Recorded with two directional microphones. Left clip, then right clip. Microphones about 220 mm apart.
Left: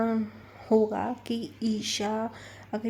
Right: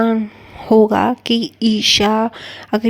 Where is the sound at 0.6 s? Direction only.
40° right (ahead or behind).